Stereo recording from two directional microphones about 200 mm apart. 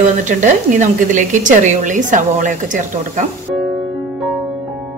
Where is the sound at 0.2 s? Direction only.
40° right (ahead or behind).